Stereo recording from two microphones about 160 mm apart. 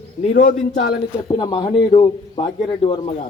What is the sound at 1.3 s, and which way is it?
Speech, 25° left (ahead or behind).